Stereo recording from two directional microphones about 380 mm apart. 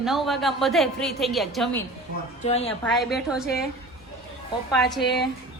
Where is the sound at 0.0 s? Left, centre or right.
Centre.